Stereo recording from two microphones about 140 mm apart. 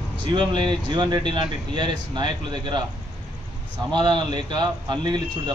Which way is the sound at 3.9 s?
30° right (ahead or behind).